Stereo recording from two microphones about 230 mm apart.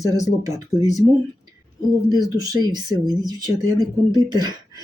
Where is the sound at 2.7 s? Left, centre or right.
Centre.